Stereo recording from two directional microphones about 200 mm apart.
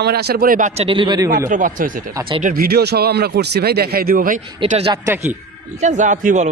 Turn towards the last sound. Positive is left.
turn(degrees=-40)  # may be behind; listen again after turning